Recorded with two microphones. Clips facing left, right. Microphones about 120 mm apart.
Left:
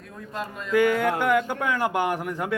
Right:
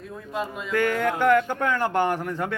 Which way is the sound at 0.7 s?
10° left (ahead or behind).